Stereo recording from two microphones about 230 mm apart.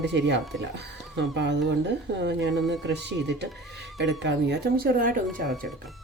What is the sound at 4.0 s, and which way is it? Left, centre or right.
Speech, right.